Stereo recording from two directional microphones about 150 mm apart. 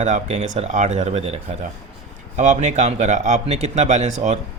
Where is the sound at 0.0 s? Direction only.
50° right (ahead or behind).